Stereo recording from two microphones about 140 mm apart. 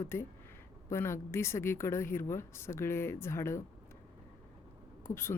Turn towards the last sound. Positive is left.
turn(degrees=15)  # may be behind; listen again after turning